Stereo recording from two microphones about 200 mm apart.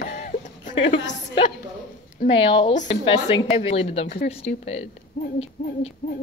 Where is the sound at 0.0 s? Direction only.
40° left (ahead or behind).